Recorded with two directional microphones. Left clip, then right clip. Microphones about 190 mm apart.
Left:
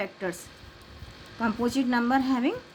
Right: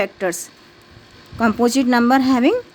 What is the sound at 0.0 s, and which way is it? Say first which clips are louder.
Speech: right 11 dB; 55° right (ahead or behind).